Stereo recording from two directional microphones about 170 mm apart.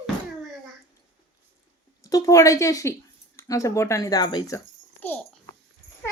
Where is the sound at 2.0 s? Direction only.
20° left (ahead or behind).